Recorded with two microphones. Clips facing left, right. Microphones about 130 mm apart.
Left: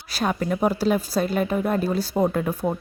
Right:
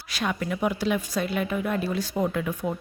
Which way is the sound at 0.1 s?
40° left (ahead or behind).